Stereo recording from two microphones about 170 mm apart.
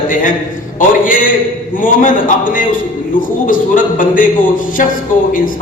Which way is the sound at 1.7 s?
50° left (ahead or behind).